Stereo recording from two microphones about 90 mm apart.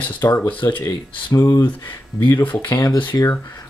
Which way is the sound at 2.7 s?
40° left (ahead or behind).